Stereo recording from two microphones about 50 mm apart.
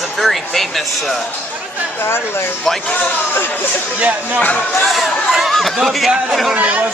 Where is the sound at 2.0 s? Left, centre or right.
Left.